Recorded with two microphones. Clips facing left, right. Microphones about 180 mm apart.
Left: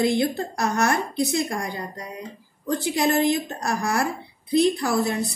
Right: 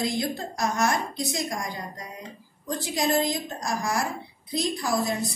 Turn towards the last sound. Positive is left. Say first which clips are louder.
# left 3 dB
turn(degrees=65)  # may be behind; listen again after turning